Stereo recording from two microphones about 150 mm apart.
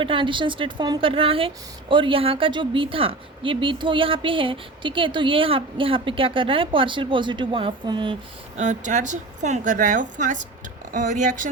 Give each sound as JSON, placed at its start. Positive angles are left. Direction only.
{"t": 0.0, "sound": "a woman's voice", "side_deg": -35}
{"t": 8.5, "sound": "a woman's voice", "side_deg": -55}